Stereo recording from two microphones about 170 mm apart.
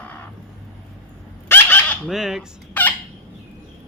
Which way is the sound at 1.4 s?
10° left (ahead or behind).